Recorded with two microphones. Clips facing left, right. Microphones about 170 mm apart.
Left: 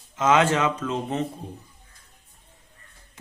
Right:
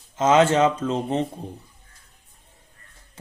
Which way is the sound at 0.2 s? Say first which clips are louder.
Right 3 dB; 30° right (ahead or behind).